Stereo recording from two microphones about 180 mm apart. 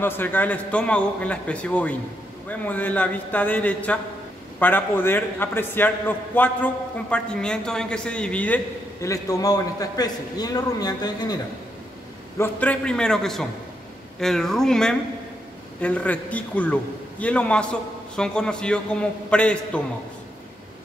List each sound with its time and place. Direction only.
0.0 s a man's voice: 10° left (ahead or behind)
9.0 s a man's voice: 20° left (ahead or behind)
12.4 s a man's voice: 10° left (ahead or behind)